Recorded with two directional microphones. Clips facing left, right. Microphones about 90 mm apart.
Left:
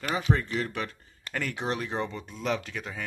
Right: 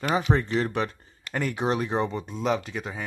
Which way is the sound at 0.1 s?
25° right (ahead or behind).